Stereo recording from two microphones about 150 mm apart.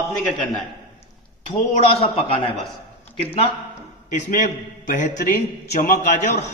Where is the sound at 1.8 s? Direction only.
40° left (ahead or behind).